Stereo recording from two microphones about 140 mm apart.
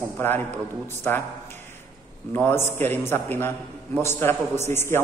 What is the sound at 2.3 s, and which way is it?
A man's voice, 15° left (ahead or behind).